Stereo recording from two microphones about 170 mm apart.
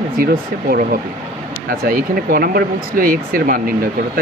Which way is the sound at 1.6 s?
60° right (ahead or behind).